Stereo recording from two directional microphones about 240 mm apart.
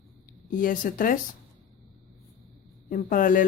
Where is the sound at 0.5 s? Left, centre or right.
Left.